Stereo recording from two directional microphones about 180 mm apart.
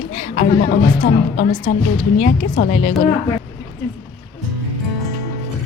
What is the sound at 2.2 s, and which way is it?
Speech, 45° left (ahead or behind).